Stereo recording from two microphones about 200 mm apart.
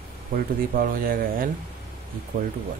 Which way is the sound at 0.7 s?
45° right (ahead or behind).